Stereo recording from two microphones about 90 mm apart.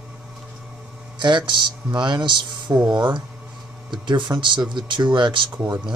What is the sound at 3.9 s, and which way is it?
Speech, 55° right (ahead or behind).